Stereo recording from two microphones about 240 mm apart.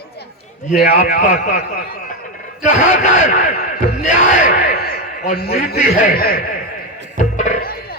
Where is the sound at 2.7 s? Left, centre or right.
Left.